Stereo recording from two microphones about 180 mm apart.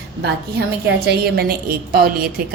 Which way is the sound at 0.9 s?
60° right (ahead or behind).